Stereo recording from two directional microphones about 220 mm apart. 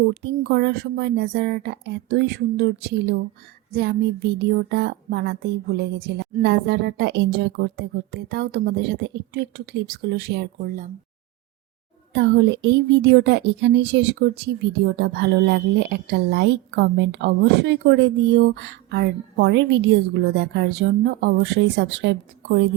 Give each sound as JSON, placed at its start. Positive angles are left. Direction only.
{"t": 0.1, "sound": "speech", "side_deg": -50}
{"t": 12.1, "sound": "speech", "side_deg": -55}